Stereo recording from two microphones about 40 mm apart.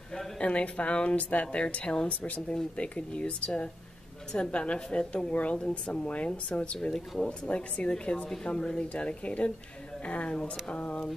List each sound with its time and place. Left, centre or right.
0.4 s a woman's voice: left